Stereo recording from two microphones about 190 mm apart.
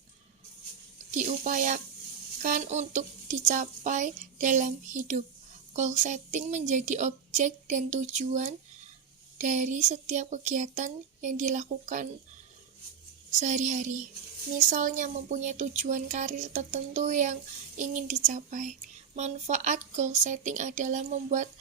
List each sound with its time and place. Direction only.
1.1 s speech: 40° right (ahead or behind)
13.4 s speech: 40° right (ahead or behind)